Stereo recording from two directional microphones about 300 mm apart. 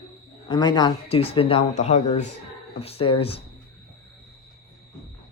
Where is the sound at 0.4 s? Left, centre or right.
Centre.